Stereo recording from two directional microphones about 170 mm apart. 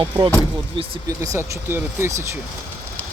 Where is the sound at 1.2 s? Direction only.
15° right (ahead or behind).